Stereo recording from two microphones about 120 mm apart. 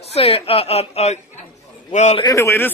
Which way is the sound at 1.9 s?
75° left (ahead or behind).